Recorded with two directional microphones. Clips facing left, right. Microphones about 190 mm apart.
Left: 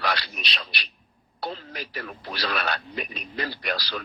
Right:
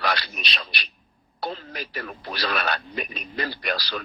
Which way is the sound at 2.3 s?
45° right (ahead or behind).